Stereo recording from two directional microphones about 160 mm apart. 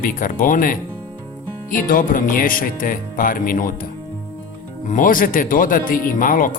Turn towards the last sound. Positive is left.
turn(degrees=60)  # may be behind; listen again after turning